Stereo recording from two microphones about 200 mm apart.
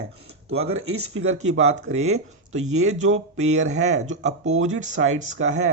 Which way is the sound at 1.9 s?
35° right (ahead or behind).